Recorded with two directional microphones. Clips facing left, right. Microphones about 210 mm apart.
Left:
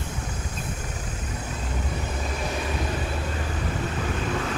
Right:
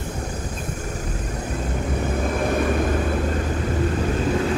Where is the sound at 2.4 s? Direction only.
50° right (ahead or behind).